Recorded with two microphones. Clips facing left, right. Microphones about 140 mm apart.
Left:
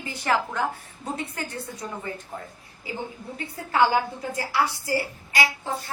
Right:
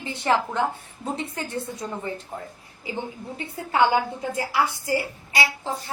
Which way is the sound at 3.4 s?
25° right (ahead or behind).